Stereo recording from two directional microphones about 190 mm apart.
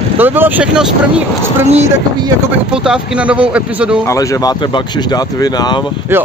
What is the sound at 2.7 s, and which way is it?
A man's voice, 5° right (ahead or behind).